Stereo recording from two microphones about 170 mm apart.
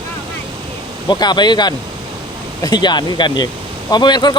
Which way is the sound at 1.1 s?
25° left (ahead or behind).